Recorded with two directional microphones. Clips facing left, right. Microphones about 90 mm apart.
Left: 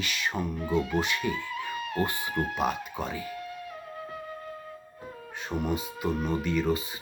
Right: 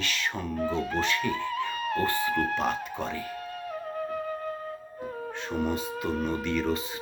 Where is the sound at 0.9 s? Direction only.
15° left (ahead or behind).